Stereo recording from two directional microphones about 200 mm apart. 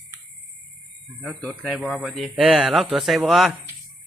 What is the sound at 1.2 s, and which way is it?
Speech, centre (ahead or behind).